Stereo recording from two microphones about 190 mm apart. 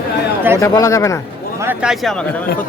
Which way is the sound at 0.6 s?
15° left (ahead or behind).